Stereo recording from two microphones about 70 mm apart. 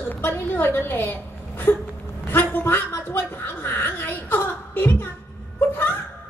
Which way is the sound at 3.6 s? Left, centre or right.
Left.